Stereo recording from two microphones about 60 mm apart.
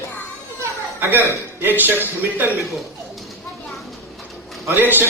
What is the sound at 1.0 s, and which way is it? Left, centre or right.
A man's voice, right.